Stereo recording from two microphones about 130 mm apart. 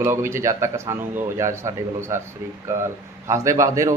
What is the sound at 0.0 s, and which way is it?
Speech, 20° right (ahead or behind).